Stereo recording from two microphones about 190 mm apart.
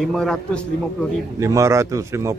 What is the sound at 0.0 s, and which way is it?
Speech, centre (ahead or behind).